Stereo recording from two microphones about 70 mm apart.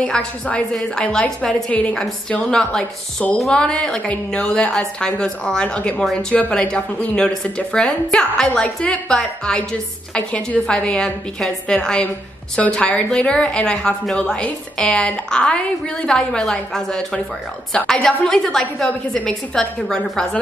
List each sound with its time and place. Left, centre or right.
0.0 s a woman's voice: centre